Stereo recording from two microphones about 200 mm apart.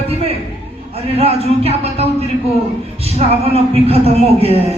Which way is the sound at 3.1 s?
30° right (ahead or behind).